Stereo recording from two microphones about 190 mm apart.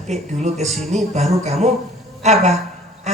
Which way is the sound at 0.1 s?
35° right (ahead or behind).